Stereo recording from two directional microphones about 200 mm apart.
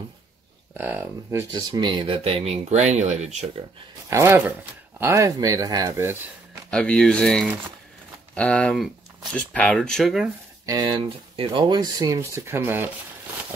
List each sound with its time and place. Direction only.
0.7 s speech: 10° right (ahead or behind)
1.5 s speech: 20° right (ahead or behind)
4.1 s speech: 15° right (ahead or behind)
6.7 s speech: 5° left (ahead or behind)
10.6 s speech: 20° right (ahead or behind)